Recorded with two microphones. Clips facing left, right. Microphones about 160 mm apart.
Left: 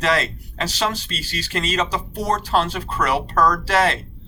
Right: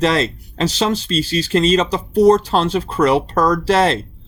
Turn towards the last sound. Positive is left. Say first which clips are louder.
# right 4 dB
turn(degrees=-25)  # may be behind; listen again after turning